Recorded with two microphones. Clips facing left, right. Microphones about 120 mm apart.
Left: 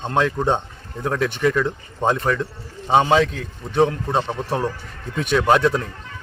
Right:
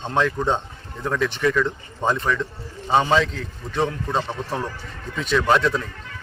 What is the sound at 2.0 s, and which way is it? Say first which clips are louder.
A man's voice: left 2 dB; 20° left (ahead or behind).